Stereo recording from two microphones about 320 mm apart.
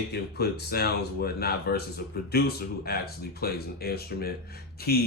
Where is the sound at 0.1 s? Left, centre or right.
Left.